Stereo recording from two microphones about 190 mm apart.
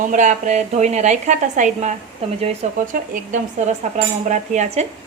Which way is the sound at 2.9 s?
40° right (ahead or behind).